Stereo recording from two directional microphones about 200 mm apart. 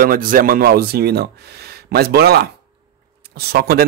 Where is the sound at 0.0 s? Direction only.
45° right (ahead or behind).